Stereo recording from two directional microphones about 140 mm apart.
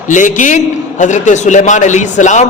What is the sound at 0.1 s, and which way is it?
A man's voice, 65° left (ahead or behind).